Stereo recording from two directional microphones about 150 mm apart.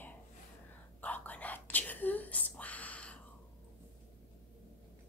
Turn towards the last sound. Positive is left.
turn(degrees=10)  # may be behind; listen again after turning